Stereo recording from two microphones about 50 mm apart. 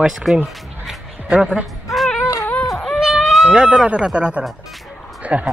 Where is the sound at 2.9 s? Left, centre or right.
Centre.